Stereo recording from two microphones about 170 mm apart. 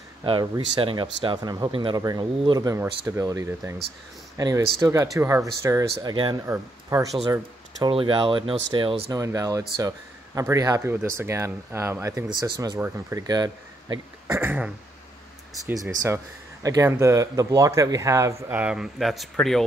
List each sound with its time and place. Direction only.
0.2 s speech: 30° right (ahead or behind)
7.8 s speech: 30° right (ahead or behind)
9.1 s speech: 20° right (ahead or behind)
14.2 s throat clearing: 15° right (ahead or behind)
15.6 s speech: 20° right (ahead or behind); by 19.6 s centre (ahead or behind)